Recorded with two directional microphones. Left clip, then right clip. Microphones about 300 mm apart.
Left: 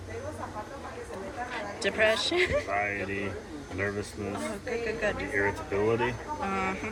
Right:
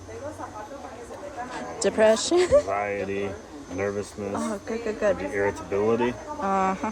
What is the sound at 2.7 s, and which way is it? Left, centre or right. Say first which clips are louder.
Speech: right 3 dB; right.